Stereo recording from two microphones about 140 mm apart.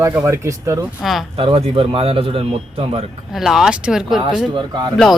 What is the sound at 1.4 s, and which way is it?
Speech, 45° right (ahead or behind).